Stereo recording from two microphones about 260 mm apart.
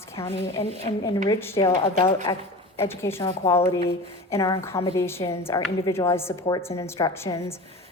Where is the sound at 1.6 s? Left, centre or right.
Left.